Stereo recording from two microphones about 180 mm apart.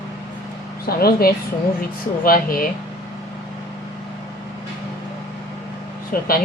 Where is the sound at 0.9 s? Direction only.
55° left (ahead or behind).